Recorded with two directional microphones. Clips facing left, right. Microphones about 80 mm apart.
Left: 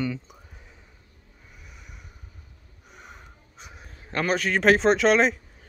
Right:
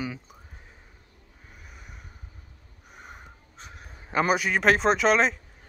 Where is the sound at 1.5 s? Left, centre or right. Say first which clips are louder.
Right 1 dB; right.